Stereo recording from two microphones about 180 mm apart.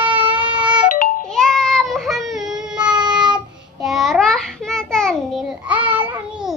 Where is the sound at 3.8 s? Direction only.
Centre (ahead or behind).